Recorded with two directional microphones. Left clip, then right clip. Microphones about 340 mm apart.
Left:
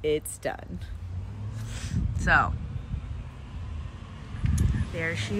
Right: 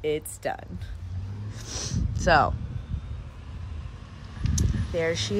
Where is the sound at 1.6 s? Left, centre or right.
Centre.